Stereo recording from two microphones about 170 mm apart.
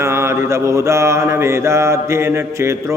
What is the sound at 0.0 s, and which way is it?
Mantra, 15° right (ahead or behind).